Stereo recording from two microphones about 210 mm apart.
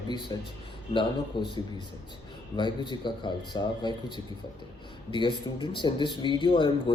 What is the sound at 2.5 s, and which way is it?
A man's voice, 20° left (ahead or behind).